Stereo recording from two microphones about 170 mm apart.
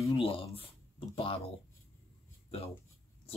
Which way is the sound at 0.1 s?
35° left (ahead or behind).